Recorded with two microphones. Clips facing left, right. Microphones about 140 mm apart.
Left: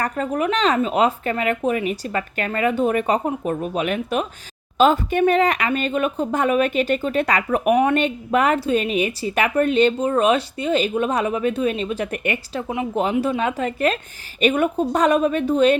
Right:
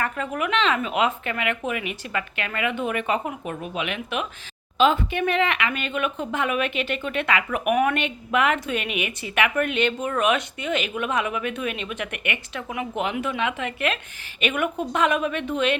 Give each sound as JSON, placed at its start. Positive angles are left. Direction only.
{"t": 0.0, "sound": "speech", "side_deg": 35}